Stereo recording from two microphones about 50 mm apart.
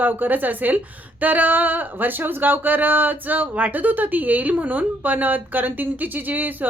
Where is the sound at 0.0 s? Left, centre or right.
Right.